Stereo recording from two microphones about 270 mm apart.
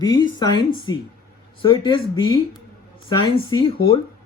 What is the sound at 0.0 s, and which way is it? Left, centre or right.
Speech, centre.